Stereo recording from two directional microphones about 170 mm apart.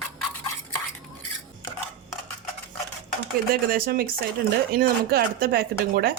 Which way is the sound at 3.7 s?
60° right (ahead or behind).